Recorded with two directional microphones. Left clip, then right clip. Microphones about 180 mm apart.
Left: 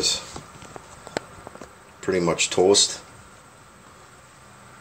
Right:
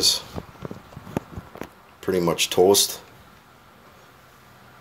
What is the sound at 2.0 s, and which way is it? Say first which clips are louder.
Speech: even; 20° right (ahead or behind).